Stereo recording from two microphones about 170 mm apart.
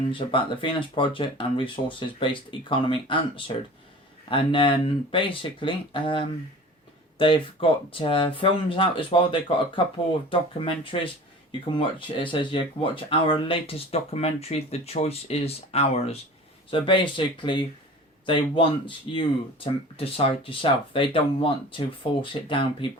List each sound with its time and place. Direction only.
0.1 s speech: 30° left (ahead or behind)